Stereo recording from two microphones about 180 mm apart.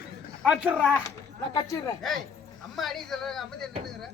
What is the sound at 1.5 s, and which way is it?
Speech, 20° left (ahead or behind).